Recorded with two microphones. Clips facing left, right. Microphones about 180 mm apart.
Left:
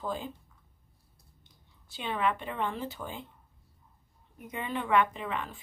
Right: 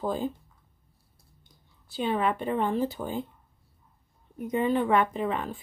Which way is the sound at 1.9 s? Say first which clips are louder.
Right 4 dB; 40° right (ahead or behind).